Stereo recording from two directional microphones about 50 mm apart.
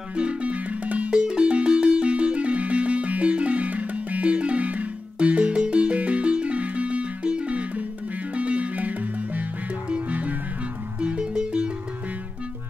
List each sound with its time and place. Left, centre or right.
0.1 s music: right
11.0 s music: centre